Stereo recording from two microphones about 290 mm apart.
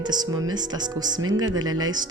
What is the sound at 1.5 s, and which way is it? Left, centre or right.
Speech, right.